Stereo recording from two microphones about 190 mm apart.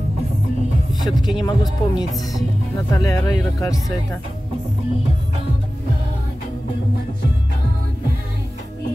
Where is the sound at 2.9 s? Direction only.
20° left (ahead or behind).